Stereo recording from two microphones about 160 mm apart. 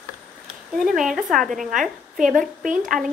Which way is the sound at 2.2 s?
55° right (ahead or behind).